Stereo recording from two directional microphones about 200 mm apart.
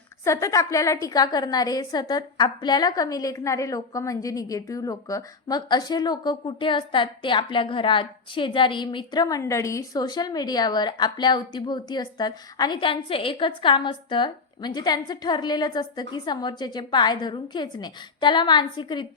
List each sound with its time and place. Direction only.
0.3 s a woman's voice: 15° left (ahead or behind)